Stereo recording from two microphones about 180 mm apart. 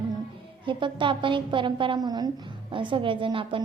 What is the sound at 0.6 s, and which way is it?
A woman's voice, 25° right (ahead or behind).